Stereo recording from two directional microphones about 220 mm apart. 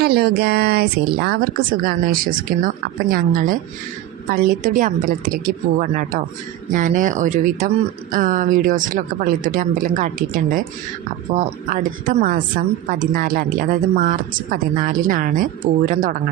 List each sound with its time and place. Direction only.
0.0 s speech: 45° right (ahead or behind)